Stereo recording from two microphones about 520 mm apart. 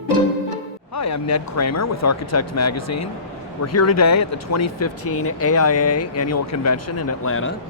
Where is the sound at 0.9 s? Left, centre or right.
Left.